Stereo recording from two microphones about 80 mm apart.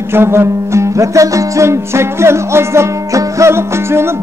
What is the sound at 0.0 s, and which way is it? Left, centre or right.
Music, right.